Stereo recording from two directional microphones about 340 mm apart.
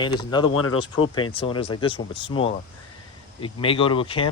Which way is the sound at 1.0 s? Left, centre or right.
Centre.